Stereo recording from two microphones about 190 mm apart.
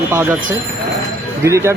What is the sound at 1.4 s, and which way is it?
Speech, 15° right (ahead or behind).